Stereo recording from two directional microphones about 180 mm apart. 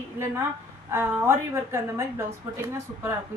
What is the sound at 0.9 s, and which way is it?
A woman's voice, 15° right (ahead or behind).